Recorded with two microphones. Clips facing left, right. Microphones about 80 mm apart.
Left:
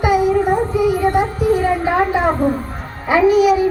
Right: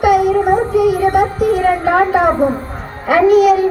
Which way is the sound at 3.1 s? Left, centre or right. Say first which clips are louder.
Right 3 dB; right.